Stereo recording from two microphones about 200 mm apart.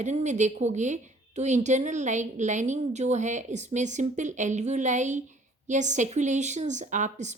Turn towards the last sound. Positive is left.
turn(degrees=-35)  # may be behind; listen again after turning